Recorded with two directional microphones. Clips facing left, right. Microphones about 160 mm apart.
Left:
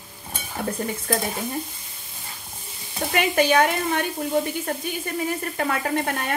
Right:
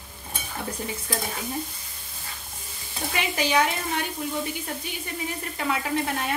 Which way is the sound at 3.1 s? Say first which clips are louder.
Left 6 dB; 55° left (ahead or behind).